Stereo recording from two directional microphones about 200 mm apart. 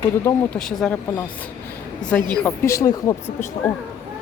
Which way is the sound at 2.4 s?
15° left (ahead or behind).